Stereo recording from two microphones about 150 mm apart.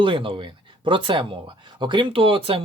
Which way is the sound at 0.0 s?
35° right (ahead or behind).